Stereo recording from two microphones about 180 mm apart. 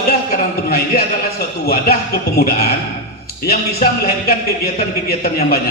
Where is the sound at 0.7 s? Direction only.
60° left (ahead or behind).